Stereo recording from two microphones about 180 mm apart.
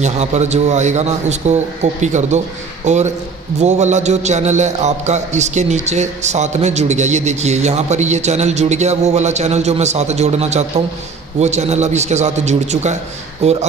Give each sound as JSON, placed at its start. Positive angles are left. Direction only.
{"t": 0.0, "sound": "a man's voice", "side_deg": -40}